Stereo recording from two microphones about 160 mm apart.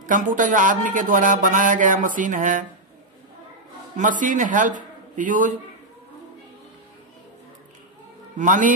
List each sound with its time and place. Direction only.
0.0 s speech: 55° right (ahead or behind)
3.9 s a man's voice: 55° right (ahead or behind)
8.4 s a man's voice: 55° right (ahead or behind)